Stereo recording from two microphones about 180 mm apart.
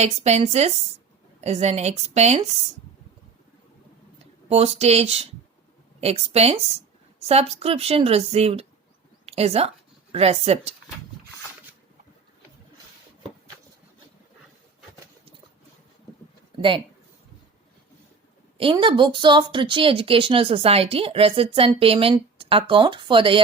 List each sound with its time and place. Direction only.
0.0 s a woman's voice: 35° right (ahead or behind)
4.4 s a woman's voice: 35° right (ahead or behind)
16.6 s speech: 30° right (ahead or behind)
18.5 s speech: 30° right (ahead or behind)